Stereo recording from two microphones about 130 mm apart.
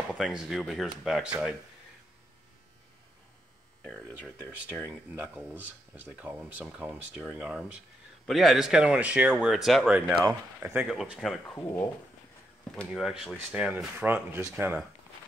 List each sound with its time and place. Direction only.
0.1 s speech: 5° right (ahead or behind)
3.8 s speech: 5° left (ahead or behind)
5.2 s speech: 10° right (ahead or behind)
10.9 s speech: centre (ahead or behind)
11.5 s speech: 15° left (ahead or behind)
12.7 s speech: centre (ahead or behind); by 14.8 s 15° right (ahead or behind)